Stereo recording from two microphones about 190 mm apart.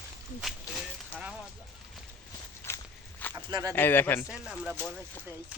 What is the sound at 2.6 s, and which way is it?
Walk, 10° left (ahead or behind).